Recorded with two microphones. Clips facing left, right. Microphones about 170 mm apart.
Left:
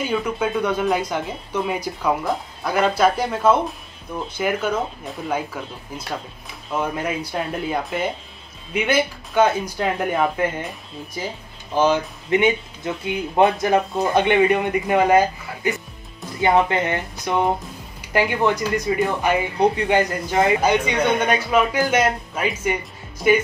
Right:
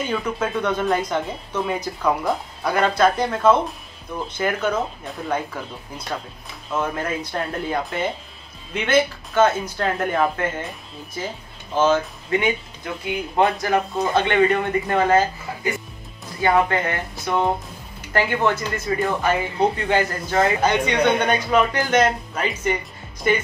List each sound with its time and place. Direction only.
0.0 s speech: 10° left (ahead or behind)
11.7 s speech: 15° left (ahead or behind)